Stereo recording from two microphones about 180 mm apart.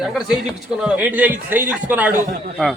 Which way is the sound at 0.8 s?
10° right (ahead or behind).